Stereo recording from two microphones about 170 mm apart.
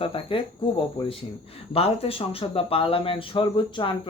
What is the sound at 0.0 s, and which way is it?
Speech, 30° left (ahead or behind).